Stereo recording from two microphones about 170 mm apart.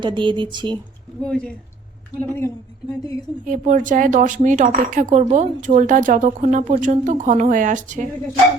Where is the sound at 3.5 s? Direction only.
50° right (ahead or behind).